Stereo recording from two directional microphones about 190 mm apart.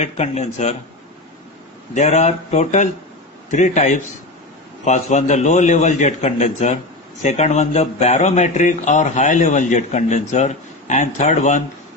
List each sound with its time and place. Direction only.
0.0 s speech: 35° left (ahead or behind)
2.0 s speech: 35° left (ahead or behind)